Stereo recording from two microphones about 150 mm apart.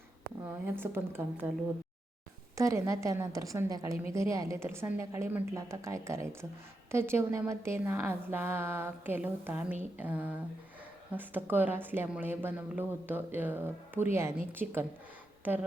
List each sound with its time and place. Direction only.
0.4 s a woman's voice: 15° right (ahead or behind)
2.6 s a woman's voice: 20° right (ahead or behind)